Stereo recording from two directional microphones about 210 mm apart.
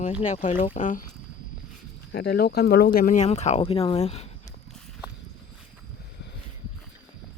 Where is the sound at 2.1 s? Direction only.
50° left (ahead or behind); by 4.3 s 30° left (ahead or behind).